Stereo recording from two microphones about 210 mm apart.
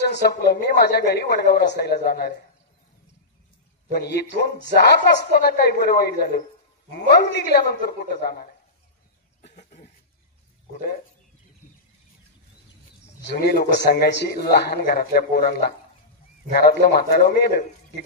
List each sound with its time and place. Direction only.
0.0 s a woman's voice: 55° left (ahead or behind)
3.9 s a woman's voice: 50° left (ahead or behind)
9.6 s cough: 35° left (ahead or behind)
13.3 s a woman's voice: 50° left (ahead or behind)